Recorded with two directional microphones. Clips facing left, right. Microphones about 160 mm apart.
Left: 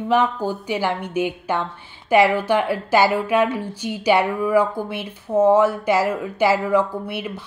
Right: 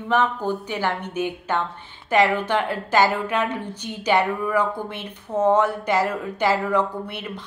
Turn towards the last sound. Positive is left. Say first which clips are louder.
# left 3 dB
turn(degrees=5)  # may be behind; listen again after turning